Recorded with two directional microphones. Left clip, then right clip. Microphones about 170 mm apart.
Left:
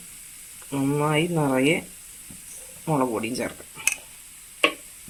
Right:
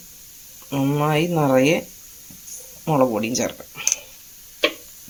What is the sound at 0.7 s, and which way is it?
Speech, 40° right (ahead or behind).